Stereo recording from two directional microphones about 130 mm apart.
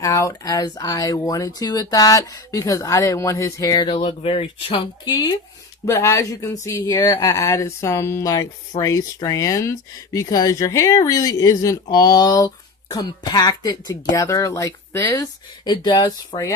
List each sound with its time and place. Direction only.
0.0 s speech: 25° left (ahead or behind)
5.9 s speech: 20° left (ahead or behind)